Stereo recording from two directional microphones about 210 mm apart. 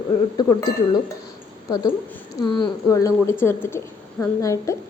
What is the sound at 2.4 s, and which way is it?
A woman's voice, 20° left (ahead or behind).